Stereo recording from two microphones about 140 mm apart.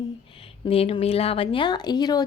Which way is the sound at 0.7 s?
45° left (ahead or behind).